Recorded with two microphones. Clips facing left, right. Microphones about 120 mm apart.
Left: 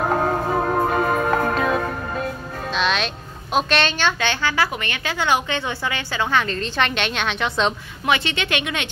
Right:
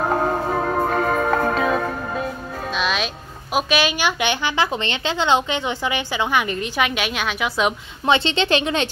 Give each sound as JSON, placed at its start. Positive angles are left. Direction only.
{"t": 0.0, "sound": "music", "side_deg": 0}
{"t": 3.5, "sound": "a woman's voice", "side_deg": -5}
{"t": 8.0, "sound": "speech", "side_deg": -25}